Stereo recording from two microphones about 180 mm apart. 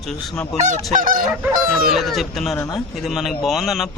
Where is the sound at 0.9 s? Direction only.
50° right (ahead or behind).